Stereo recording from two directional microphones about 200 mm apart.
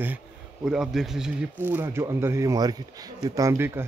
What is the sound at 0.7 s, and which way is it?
Speech, centre (ahead or behind).